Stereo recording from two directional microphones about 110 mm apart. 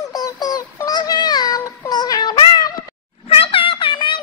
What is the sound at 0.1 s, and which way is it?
Synthetic singing, 35° left (ahead or behind).